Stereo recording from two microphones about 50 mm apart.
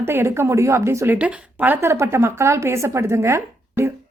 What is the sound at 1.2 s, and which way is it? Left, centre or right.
Speech, right.